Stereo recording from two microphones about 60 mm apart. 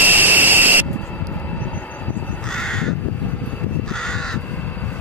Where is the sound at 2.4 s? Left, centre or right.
Centre.